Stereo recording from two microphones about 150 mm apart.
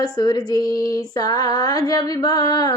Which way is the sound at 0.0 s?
30° left (ahead or behind).